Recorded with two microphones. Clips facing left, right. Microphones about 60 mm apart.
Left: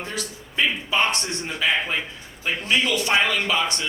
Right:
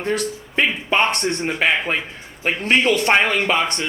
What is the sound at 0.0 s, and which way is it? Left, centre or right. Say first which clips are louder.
A man's voice: right 9 dB; right.